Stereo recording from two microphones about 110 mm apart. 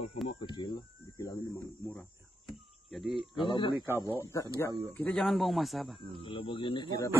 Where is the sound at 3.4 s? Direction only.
45° left (ahead or behind).